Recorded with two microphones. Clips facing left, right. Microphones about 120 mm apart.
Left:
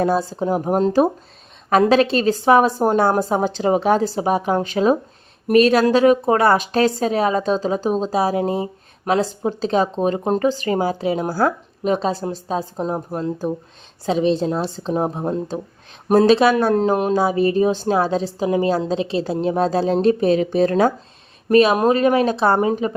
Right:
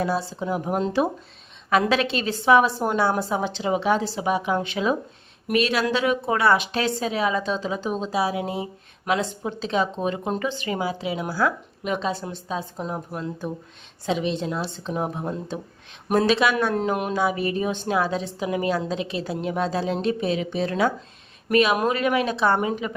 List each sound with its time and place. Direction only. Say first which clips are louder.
0.0 s a woman's voice: left 6 dB; 45° left (ahead or behind)